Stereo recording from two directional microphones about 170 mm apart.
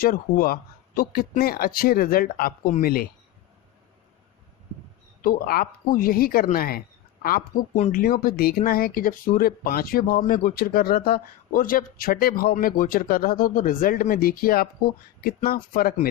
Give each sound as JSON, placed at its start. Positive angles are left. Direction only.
{"t": 0.0, "sound": "speech", "side_deg": 60}
{"t": 5.2, "sound": "speech", "side_deg": 60}